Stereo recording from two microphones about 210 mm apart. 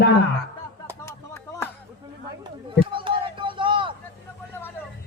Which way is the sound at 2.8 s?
25° right (ahead or behind).